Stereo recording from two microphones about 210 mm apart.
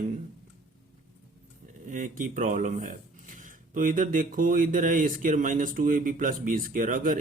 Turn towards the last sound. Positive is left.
turn(degrees=-40)  # may be behind; listen again after turning